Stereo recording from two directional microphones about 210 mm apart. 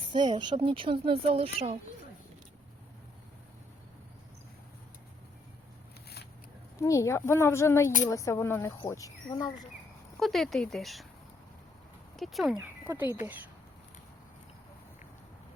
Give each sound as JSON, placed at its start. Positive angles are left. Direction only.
{"t": 0.1, "sound": "speech", "side_deg": -20}
{"t": 6.8, "sound": "speech", "side_deg": 15}
{"t": 10.2, "sound": "speech", "side_deg": 0}
{"t": 12.1, "sound": "speech", "side_deg": 0}